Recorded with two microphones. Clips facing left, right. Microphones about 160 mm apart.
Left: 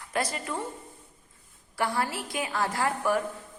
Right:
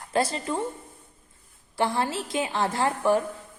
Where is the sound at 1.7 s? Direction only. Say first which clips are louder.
Right 3 dB; 25° right (ahead or behind).